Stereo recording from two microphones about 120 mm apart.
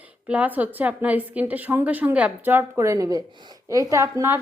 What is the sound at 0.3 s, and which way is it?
A woman's voice, 15° right (ahead or behind).